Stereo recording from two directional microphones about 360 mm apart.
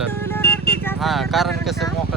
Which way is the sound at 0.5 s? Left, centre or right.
Left.